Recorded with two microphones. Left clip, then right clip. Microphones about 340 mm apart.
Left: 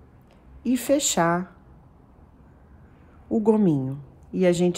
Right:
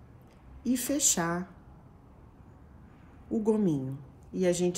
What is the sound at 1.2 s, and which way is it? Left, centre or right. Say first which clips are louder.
Speech: left 10 dB; left.